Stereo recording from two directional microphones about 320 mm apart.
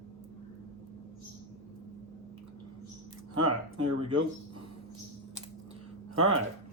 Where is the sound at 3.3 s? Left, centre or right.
Right.